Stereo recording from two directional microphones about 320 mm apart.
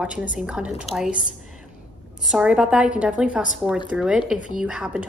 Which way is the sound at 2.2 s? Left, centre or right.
Centre.